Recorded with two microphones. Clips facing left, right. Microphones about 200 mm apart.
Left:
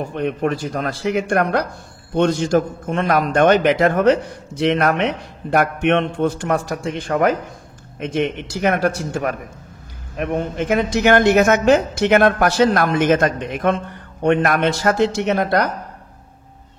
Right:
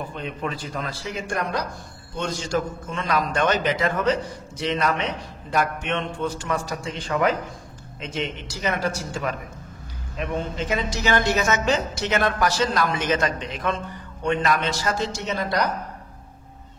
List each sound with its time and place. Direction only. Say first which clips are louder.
0.1 s speech: left 9 dB; 60° left (ahead or behind)